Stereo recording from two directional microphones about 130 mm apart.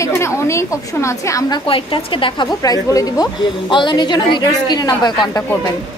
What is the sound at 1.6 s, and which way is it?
Speech, 40° left (ahead or behind).